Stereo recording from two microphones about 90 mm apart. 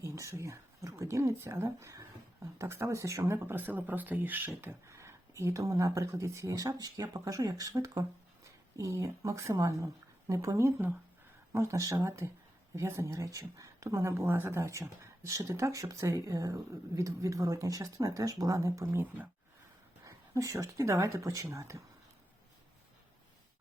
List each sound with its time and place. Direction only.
0.0 s speech: 35° right (ahead or behind)
18.9 s speech: 20° right (ahead or behind)
20.1 s speech: 40° right (ahead or behind)